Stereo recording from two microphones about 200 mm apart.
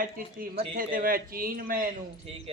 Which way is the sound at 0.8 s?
45° right (ahead or behind).